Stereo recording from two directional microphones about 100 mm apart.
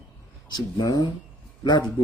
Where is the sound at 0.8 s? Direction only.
35° left (ahead or behind).